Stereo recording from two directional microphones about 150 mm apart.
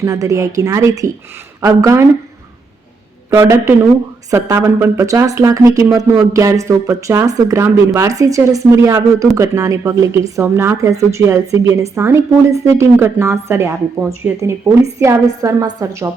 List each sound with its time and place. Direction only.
0.0 s speech: 20° right (ahead or behind)
3.2 s a man's voice: 20° right (ahead or behind)
14.9 s speech: 20° right (ahead or behind)